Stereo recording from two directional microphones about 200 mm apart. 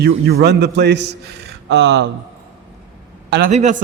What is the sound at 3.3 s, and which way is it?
Speech, 45° right (ahead or behind).